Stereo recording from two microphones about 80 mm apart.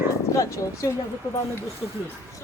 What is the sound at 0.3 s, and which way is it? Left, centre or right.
Speech, left.